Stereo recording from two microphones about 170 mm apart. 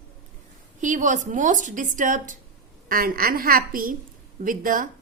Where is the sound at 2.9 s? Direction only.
60° right (ahead or behind).